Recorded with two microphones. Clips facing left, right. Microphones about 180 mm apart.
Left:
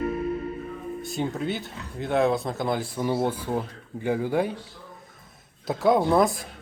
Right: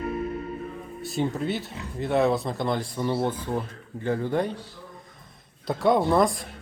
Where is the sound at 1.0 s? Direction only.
Centre (ahead or behind).